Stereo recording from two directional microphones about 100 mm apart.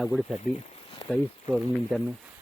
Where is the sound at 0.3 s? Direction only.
90° left.